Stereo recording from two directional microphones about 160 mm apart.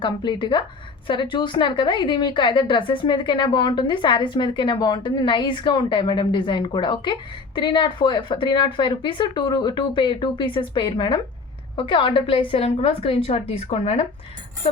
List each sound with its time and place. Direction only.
0.0 s a woman's voice: 30° left (ahead or behind)